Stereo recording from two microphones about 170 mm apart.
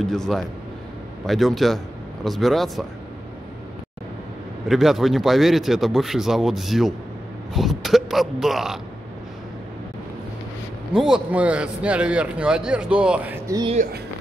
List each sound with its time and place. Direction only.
0.0 s speech: centre (ahead or behind)
4.6 s speech: centre (ahead or behind)
10.9 s a man's voice: 5° right (ahead or behind)
13.8 s speech: 45° right (ahead or behind)